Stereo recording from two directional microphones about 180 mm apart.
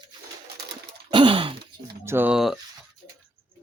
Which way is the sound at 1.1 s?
30° right (ahead or behind).